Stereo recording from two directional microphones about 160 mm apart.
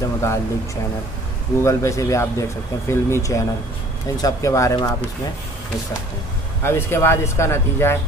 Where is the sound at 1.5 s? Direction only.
20° left (ahead or behind).